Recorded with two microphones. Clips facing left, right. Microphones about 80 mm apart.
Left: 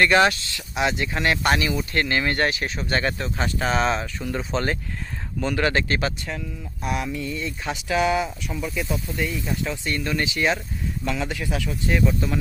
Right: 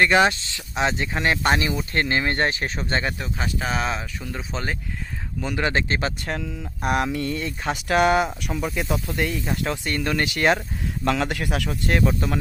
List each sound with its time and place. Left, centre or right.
0.0 s speech: centre; by 2.8 s right
2.9 s speech: centre
5.6 s speech: right
6.8 s speech: right
8.7 s speech: right
9.0 s speech: right
9.9 s speech: right